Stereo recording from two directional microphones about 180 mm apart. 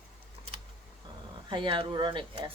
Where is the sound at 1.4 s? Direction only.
30° right (ahead or behind).